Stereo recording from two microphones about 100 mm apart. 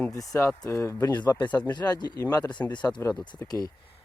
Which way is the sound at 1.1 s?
45° left (ahead or behind).